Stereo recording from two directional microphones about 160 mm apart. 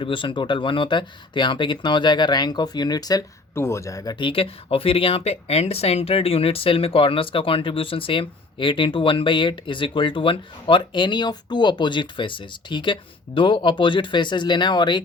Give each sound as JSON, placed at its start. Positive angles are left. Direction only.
{"t": 0.0, "sound": "speech", "side_deg": 30}